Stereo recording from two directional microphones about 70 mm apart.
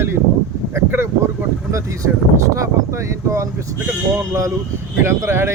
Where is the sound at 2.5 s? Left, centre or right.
Right.